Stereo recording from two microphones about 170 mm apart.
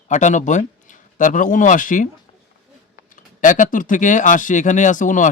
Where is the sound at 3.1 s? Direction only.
50° left (ahead or behind).